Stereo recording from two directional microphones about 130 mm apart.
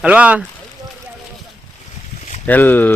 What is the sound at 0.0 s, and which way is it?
Speech, 10° right (ahead or behind).